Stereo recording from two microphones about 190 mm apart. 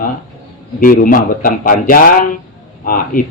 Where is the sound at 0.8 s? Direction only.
45° left (ahead or behind).